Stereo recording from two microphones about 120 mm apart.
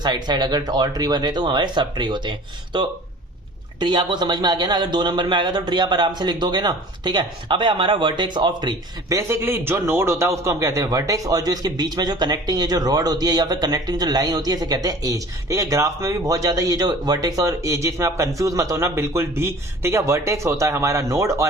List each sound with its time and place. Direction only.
0.0 s a man's voice: 35° right (ahead or behind)
9.1 s a man's voice: 20° right (ahead or behind)